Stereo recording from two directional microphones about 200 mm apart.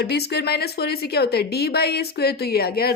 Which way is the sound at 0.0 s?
55° left (ahead or behind).